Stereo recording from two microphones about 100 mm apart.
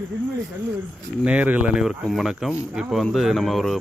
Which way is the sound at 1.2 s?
15° right (ahead or behind).